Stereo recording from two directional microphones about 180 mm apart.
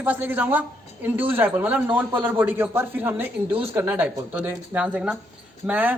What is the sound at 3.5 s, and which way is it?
Speech, 30° right (ahead or behind).